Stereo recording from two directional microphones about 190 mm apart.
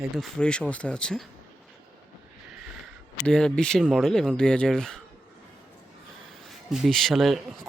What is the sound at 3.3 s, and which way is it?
Speech, 5° left (ahead or behind).